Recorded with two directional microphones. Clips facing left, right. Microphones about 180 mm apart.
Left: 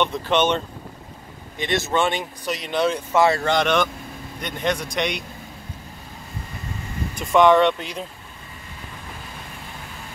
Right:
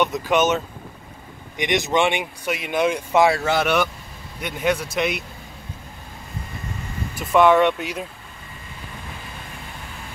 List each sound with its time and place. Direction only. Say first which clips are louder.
0.2 s speech: right 1 dB; 10° right (ahead or behind)
1.6 s speech: right 2 dB; 15° right (ahead or behind)
7.2 s speech: even; 5° right (ahead or behind)